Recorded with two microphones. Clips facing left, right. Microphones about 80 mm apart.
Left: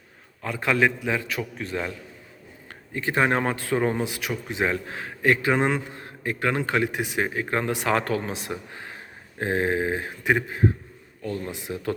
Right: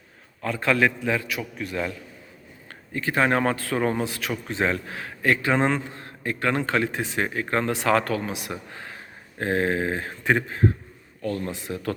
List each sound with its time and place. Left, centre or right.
0.4 s a man's voice: centre
1.3 s a man's voice: left
2.9 s a man's voice: left